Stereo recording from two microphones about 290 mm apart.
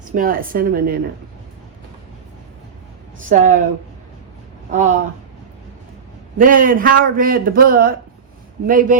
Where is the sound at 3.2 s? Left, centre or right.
Right.